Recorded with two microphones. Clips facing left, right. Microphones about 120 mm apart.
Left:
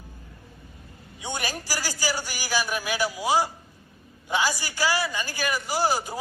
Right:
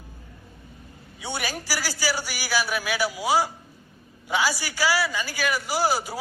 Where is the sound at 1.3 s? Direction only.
10° right (ahead or behind).